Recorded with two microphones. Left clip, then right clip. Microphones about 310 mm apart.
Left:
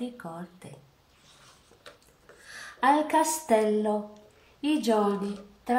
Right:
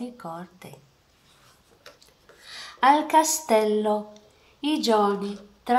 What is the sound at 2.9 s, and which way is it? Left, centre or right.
Speech, centre.